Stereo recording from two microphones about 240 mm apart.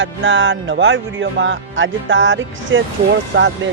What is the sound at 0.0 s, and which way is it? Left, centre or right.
Speech, right.